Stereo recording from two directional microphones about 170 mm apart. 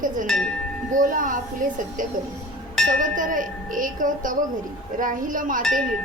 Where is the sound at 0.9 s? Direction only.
50° right (ahead or behind).